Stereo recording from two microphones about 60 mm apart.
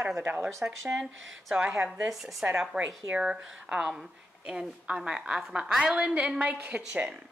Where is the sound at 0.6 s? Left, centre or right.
Centre; by 2.6 s right.